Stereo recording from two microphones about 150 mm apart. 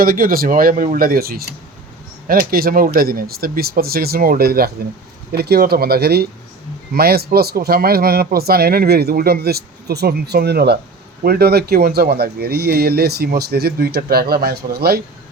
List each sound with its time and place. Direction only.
0.0 s speech: 70° right (ahead or behind); by 1.5 s 90° right
2.2 s speech: 75° right (ahead or behind)